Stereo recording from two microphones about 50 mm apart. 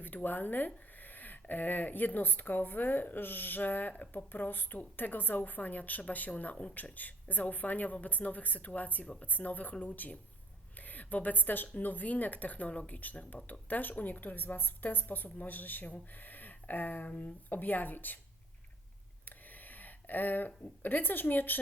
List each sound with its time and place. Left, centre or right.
0.0 s speech: left
19.5 s speech: left